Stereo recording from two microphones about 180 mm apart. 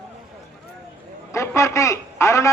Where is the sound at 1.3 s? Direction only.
15° left (ahead or behind).